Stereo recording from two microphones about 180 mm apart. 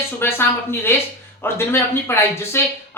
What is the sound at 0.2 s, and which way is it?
Speech, 15° left (ahead or behind).